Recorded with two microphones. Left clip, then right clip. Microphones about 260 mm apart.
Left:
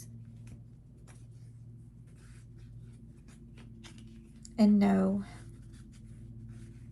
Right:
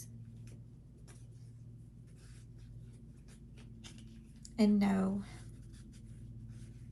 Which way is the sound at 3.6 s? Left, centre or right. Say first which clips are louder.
Left 2 dB; left.